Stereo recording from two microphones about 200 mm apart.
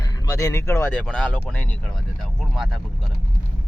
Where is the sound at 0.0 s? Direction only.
15° left (ahead or behind); by 3.1 s centre (ahead or behind).